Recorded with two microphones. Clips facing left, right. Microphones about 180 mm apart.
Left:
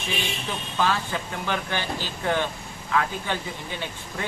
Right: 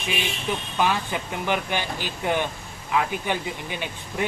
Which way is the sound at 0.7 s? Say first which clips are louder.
Even; 15° right (ahead or behind).